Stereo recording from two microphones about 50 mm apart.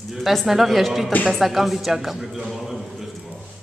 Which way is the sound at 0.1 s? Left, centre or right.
Centre.